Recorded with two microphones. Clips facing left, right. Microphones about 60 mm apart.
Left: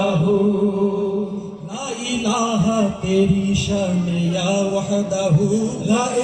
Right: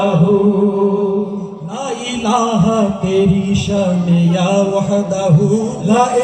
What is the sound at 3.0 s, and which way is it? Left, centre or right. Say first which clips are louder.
Music: right 3 dB; right.